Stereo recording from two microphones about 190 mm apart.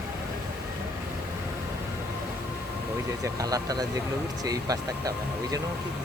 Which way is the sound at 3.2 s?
20° right (ahead or behind).